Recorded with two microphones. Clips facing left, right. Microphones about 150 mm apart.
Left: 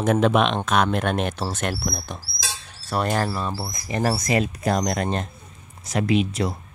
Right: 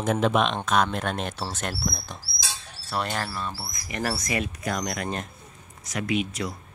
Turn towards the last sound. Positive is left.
turn(degrees=30)  # may be behind; listen again after turning